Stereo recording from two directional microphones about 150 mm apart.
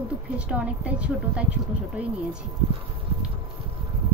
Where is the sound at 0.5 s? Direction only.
10° right (ahead or behind).